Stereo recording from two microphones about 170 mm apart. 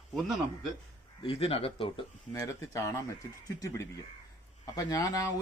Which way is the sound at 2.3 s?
20° left (ahead or behind).